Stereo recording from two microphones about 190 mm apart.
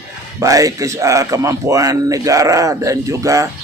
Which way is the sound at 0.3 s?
15° right (ahead or behind).